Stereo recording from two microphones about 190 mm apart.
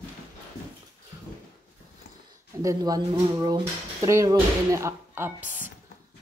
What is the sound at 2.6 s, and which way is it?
Speech, 20° right (ahead or behind).